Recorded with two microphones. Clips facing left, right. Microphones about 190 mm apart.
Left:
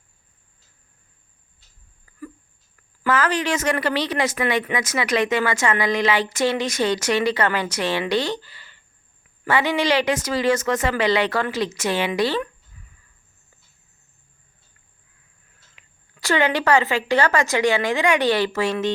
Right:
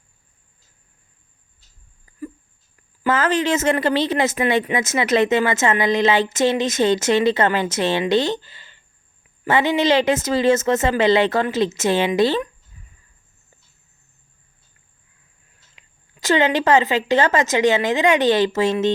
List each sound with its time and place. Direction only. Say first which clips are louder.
2.1 s a sound: right 1 dB; 15° right (ahead or behind)
3.0 s a woman's voice: right 2 dB; 25° right (ahead or behind)
15.7 s a woman's voice: right 3 dB; 20° right (ahead or behind)